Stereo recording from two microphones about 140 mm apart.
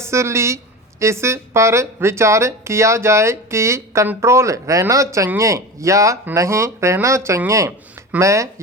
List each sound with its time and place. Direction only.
0.0 s a woman's voice: 20° right (ahead or behind)